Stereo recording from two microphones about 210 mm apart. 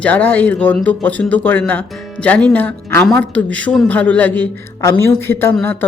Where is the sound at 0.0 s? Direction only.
10° left (ahead or behind).